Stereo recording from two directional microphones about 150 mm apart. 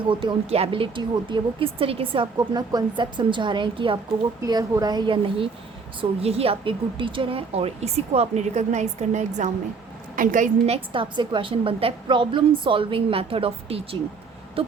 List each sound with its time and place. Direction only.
0.1 s speech: 35° right (ahead or behind)
4.4 s a woman's voice: 25° right (ahead or behind); by 10.5 s 60° right (ahead or behind)
10.7 s speech: 35° right (ahead or behind)